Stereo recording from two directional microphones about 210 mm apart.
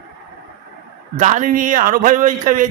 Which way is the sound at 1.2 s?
35° right (ahead or behind).